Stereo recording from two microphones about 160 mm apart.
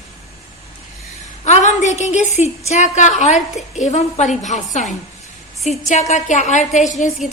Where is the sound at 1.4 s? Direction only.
45° left (ahead or behind).